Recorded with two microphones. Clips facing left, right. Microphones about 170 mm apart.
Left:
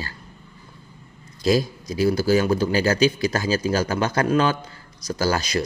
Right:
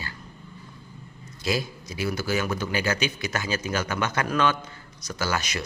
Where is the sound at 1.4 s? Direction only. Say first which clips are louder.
Left 8 dB; 40° left (ahead or behind).